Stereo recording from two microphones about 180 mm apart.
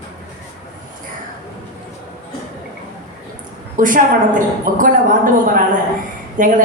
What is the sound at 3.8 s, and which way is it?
A woman's voice, 45° right (ahead or behind).